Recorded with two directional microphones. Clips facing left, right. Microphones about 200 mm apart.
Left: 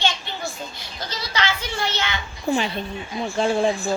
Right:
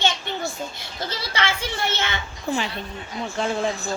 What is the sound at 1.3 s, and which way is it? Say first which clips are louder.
Speech: left 2 dB; 25° right (ahead or behind).